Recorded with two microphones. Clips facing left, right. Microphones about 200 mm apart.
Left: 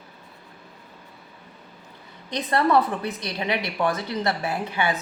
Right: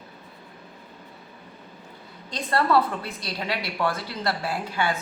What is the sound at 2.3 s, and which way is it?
A woman's voice, 20° left (ahead or behind).